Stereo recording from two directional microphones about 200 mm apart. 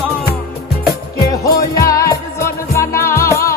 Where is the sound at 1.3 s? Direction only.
15° left (ahead or behind).